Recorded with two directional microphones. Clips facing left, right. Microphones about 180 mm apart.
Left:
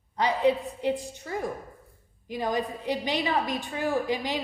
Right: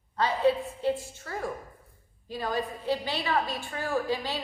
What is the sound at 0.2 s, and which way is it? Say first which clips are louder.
A woman's voice: left 1 dB; 15° left (ahead or behind).